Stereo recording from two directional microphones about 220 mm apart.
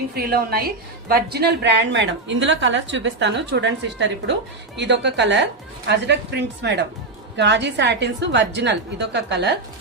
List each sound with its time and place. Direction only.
0.1 s a woman's voice: 45° right (ahead or behind)